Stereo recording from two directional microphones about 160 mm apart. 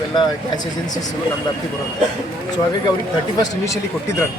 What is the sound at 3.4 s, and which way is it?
Speech, 20° left (ahead or behind).